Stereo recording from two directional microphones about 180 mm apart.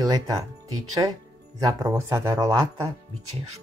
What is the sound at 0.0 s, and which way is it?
Speech, 20° right (ahead or behind).